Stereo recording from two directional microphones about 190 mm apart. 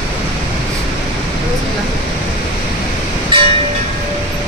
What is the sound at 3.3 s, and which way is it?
Train, 25° right (ahead or behind).